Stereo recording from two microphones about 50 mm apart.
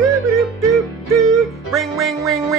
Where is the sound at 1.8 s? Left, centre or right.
Centre.